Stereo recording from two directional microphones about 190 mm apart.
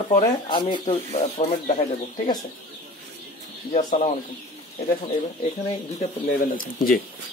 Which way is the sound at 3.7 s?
35° left (ahead or behind).